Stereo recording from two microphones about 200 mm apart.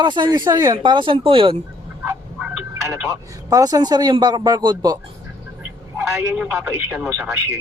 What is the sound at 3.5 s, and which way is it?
Speech, 20° right (ahead or behind).